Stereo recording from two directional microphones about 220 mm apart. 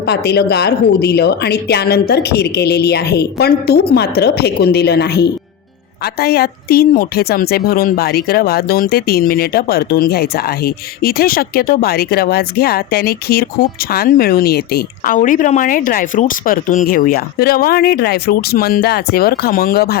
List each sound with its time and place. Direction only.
0.0 s speech: 50° left (ahead or behind)